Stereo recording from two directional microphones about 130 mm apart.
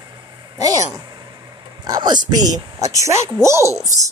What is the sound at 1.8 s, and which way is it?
Speech, 30° right (ahead or behind).